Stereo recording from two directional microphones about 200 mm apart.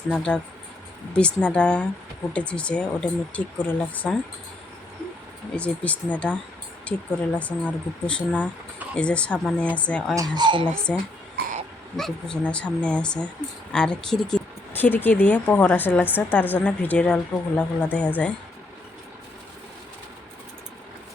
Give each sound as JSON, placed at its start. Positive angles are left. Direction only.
{"t": 0.1, "sound": "speech", "side_deg": 5}
{"t": 5.5, "sound": "speech", "side_deg": 5}
{"t": 10.2, "sound": "speech", "side_deg": -20}
{"t": 10.9, "sound": "speech", "side_deg": 0}